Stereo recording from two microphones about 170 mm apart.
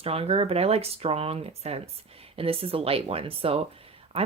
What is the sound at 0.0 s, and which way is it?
Speech, 35° right (ahead or behind).